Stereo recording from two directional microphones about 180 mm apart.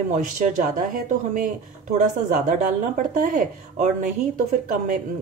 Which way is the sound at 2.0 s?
45° right (ahead or behind).